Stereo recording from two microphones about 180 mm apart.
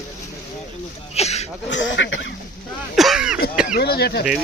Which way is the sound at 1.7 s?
90° left.